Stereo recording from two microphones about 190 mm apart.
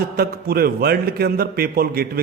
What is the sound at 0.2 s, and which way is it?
A man's voice, 55° right (ahead or behind).